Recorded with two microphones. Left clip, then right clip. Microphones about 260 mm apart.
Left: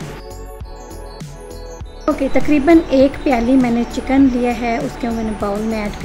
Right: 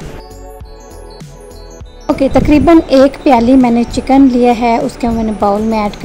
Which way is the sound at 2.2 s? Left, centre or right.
Right.